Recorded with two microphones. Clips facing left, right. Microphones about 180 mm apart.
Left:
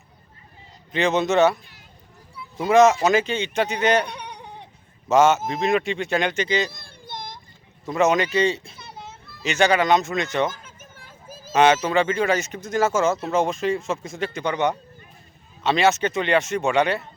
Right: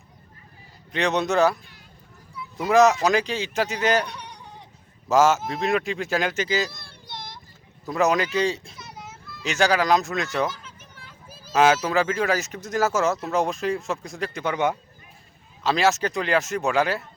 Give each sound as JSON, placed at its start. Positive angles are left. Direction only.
{"t": 0.9, "sound": "speech", "side_deg": 0}
{"t": 2.6, "sound": "speech", "side_deg": 0}
{"t": 4.0, "sound": "a sound", "side_deg": 60}
{"t": 5.0, "sound": "speech", "side_deg": 0}
{"t": 6.7, "sound": "baby cry", "side_deg": 50}
{"t": 7.9, "sound": "speech", "side_deg": 0}
{"t": 8.8, "sound": "a sound", "side_deg": 30}
{"t": 9.4, "sound": "speech", "side_deg": 0}
{"t": 10.5, "sound": "a sound", "side_deg": 50}
{"t": 11.5, "sound": "speech", "side_deg": 0}